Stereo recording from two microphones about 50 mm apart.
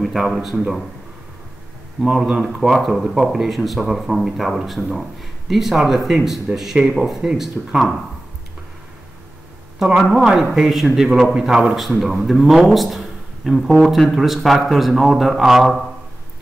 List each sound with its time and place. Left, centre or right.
0.0 s a man's voice: centre
2.0 s speech: centre
2.4 s speech: centre
9.8 s speech: centre